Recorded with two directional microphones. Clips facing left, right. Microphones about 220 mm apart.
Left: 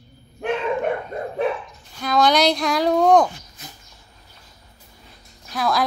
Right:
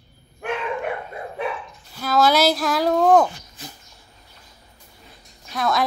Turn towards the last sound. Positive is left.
turn(degrees=0)  # may be behind; listen again after turning